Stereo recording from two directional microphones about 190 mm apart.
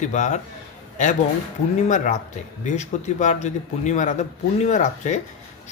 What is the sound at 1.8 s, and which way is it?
Speech, 40° left (ahead or behind).